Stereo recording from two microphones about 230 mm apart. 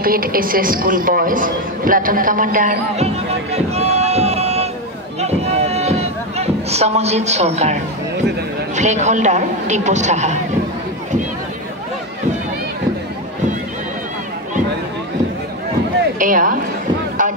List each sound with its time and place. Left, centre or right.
0.0 s speech: right
3.5 s a sound: right
8.7 s speech: right
16.2 s speech: right
17.2 s music: right